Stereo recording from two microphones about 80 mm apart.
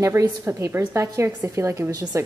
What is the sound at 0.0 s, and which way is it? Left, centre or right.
A woman's voice, right.